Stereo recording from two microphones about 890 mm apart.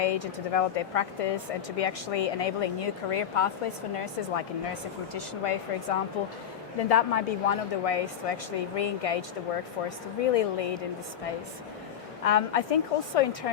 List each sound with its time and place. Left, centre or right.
0.0 s a woman's voice: left
10.3 s a woman's voice: left
12.2 s a woman's voice: left